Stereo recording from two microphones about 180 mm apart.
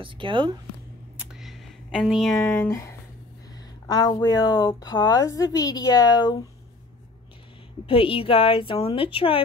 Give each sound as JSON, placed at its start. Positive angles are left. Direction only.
{"t": 0.0, "sound": "speech", "side_deg": -30}
{"t": 1.1, "sound": "a sound", "side_deg": 0}
{"t": 2.4, "sound": "speech", "side_deg": 15}
{"t": 3.8, "sound": "a woman's voice", "side_deg": 20}
{"t": 7.8, "sound": "a woman's voice", "side_deg": 30}